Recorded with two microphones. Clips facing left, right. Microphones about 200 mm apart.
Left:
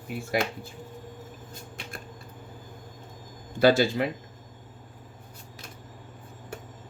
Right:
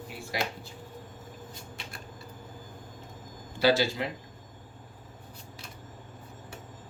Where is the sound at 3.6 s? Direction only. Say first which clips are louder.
Left 4 dB; 50° left (ahead or behind).